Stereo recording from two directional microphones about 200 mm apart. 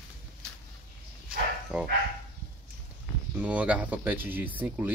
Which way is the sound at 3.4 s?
5° right (ahead or behind).